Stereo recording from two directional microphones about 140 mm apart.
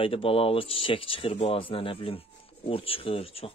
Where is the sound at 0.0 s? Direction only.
40° left (ahead or behind).